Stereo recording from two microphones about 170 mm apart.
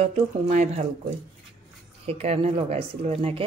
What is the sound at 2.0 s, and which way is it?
Speech, 35° right (ahead or behind).